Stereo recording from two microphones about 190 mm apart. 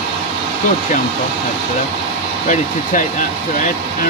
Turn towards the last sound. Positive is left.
turn(degrees=40)  # may be behind; listen again after turning